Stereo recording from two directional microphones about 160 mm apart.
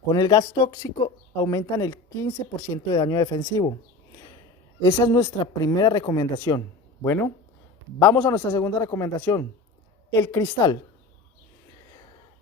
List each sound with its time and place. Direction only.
0.1 s speech: 25° left (ahead or behind)
4.8 s a man's voice: 15° left (ahead or behind)